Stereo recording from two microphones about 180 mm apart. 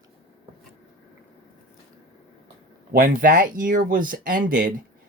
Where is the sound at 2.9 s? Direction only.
50° right (ahead or behind).